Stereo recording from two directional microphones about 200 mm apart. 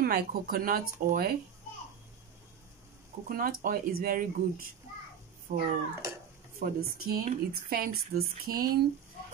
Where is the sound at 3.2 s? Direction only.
45° right (ahead or behind).